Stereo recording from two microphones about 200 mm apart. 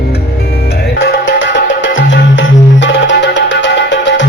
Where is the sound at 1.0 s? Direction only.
65° left (ahead or behind).